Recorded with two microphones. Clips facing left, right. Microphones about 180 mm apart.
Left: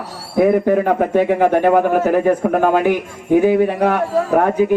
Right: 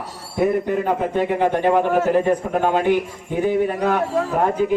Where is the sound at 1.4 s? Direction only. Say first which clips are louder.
Left 2 dB; 55° left (ahead or behind).